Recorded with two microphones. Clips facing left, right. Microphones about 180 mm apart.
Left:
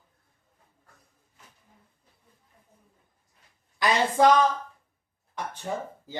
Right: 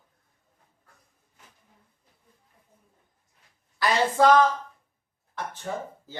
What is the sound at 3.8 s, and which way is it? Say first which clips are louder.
Speech: even; 15° left (ahead or behind).